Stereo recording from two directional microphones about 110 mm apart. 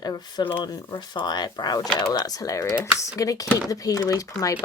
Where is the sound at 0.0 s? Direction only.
40° left (ahead or behind).